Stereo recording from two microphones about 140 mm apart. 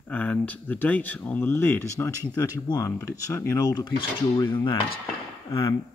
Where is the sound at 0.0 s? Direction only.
10° left (ahead or behind); by 3.9 s 30° left (ahead or behind).